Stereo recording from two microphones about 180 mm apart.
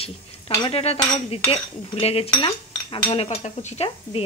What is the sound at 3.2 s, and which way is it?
Speech, 40° left (ahead or behind).